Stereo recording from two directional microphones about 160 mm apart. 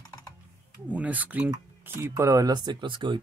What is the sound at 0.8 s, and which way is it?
Speech, 10° right (ahead or behind).